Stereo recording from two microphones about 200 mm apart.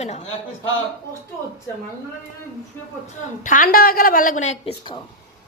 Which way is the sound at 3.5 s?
40° left (ahead or behind).